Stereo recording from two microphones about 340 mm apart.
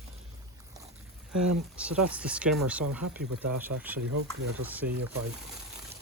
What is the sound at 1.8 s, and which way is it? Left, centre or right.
Speech, centre.